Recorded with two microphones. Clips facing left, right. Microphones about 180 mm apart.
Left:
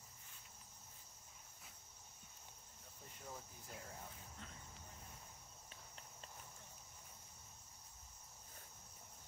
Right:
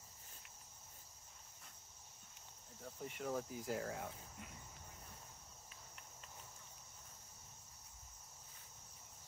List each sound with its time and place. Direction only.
2.8 s speech: 90° right